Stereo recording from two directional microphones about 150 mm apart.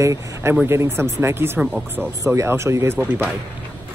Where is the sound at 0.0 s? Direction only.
20° right (ahead or behind).